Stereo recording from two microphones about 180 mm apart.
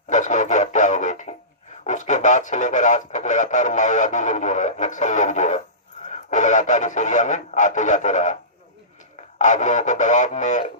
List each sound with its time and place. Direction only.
0.1 s a sound: 45° left (ahead or behind)
1.8 s speech: 45° left (ahead or behind)
9.4 s speech: 45° left (ahead or behind)